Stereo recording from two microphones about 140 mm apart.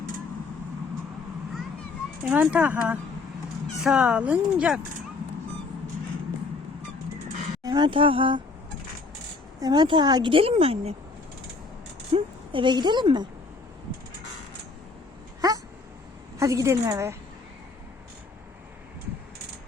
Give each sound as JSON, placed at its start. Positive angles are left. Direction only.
{"t": 2.3, "sound": "speech", "side_deg": -10}
{"t": 7.6, "sound": "speech", "side_deg": -30}
{"t": 9.6, "sound": "speech", "side_deg": -30}
{"t": 12.1, "sound": "a woman's voice", "side_deg": -35}
{"t": 15.4, "sound": "a sound", "side_deg": -25}
{"t": 16.4, "sound": "a woman's voice", "side_deg": -20}